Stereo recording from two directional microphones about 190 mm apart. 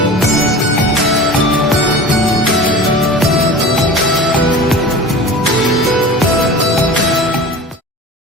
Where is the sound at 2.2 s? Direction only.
Centre (ahead or behind).